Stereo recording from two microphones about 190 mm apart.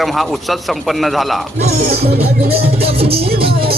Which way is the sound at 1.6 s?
35° right (ahead or behind).